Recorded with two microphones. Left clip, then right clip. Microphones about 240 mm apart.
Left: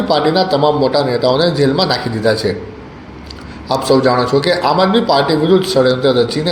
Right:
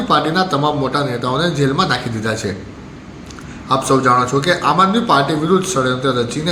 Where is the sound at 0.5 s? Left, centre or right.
Right.